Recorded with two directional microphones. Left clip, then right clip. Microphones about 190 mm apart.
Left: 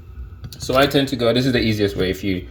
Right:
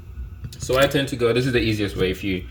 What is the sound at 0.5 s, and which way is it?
Speech, 30° left (ahead or behind).